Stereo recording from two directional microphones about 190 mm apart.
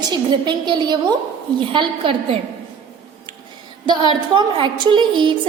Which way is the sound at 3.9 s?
25° right (ahead or behind).